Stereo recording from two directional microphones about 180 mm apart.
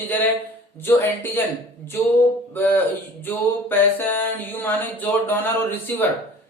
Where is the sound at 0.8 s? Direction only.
10° left (ahead or behind).